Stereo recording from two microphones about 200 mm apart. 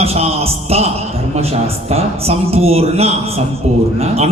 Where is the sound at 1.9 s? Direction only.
30° right (ahead or behind).